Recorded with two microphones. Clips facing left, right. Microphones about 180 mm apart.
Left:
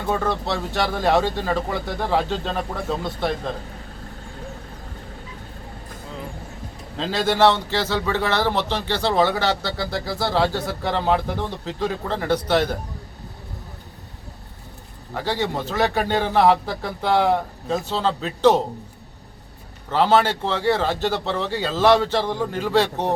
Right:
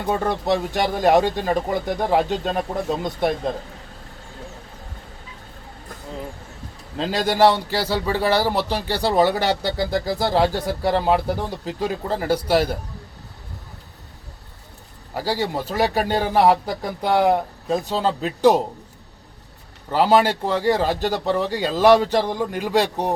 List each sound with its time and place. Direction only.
0.0 s a man's voice: 15° right (ahead or behind)
7.0 s a man's voice: 15° right (ahead or behind)
15.1 s a man's voice: 10° right (ahead or behind)
19.9 s a man's voice: 10° right (ahead or behind)